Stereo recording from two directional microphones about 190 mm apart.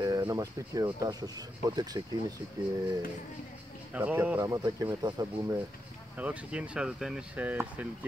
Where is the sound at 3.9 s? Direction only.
10° right (ahead or behind).